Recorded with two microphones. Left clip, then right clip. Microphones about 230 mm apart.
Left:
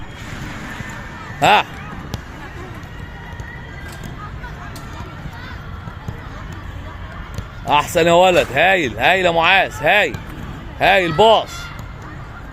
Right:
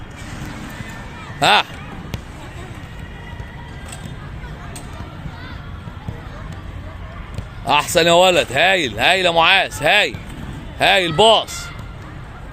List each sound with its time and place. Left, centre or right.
1.4 s speech: centre
7.6 s speech: centre